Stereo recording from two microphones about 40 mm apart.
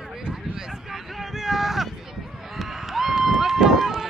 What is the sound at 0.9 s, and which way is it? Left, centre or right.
Boat, centre.